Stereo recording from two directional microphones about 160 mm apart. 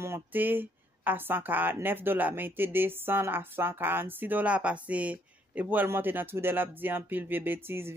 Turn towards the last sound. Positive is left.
turn(degrees=-15)  # may be behind; listen again after turning